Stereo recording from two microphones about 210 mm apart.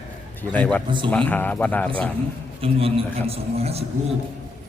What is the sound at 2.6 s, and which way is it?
A man's voice, 25° right (ahead or behind).